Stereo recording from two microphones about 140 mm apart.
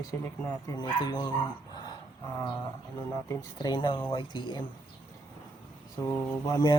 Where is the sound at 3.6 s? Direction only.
35° left (ahead or behind).